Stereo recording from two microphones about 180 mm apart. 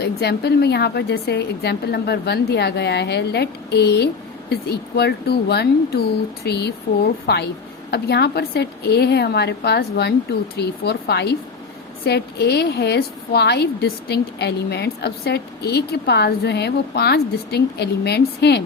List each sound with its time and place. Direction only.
0.0 s a woman's voice: 65° left (ahead or behind)